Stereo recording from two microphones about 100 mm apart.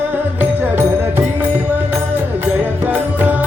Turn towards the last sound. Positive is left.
turn(degrees=-15)  # may be behind; listen again after turning